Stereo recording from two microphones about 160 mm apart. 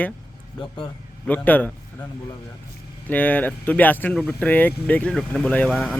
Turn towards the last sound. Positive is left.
turn(degrees=5)  # may be behind; listen again after turning